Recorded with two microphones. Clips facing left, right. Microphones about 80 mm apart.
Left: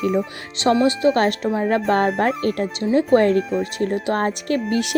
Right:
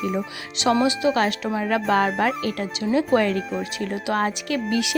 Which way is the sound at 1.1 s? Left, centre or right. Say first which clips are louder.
Left 3 dB; left.